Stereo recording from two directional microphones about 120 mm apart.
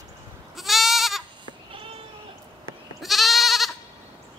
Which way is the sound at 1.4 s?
50° right (ahead or behind).